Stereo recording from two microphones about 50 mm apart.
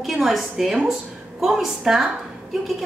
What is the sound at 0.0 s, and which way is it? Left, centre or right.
A woman's voice, centre.